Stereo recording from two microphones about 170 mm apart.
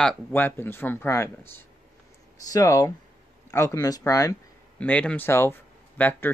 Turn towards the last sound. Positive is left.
turn(degrees=10)  # may be behind; listen again after turning